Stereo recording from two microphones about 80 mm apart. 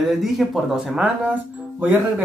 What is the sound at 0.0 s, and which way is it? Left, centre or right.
Speech, centre.